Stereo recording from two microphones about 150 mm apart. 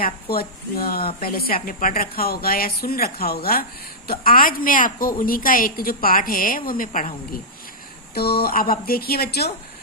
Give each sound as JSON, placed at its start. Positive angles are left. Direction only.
{"t": 0.0, "sound": "a woman's voice", "side_deg": 85}
{"t": 8.1, "sound": "speech", "side_deg": 90}